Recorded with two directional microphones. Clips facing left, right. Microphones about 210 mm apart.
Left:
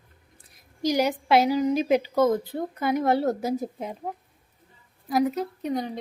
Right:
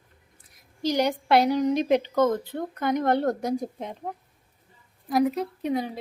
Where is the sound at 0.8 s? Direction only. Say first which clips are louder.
Left 1 dB; 10° left (ahead or behind).